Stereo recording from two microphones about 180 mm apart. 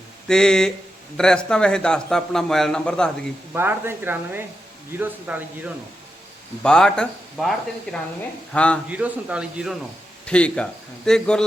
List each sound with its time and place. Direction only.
0.3 s speech: 5° left (ahead or behind)
3.5 s speech: 10° right (ahead or behind)
6.6 s speech: 5° left (ahead or behind)
8.5 s a man's voice: 5° left (ahead or behind)
8.9 s speech: 5° right (ahead or behind)
10.2 s speech: 5° left (ahead or behind)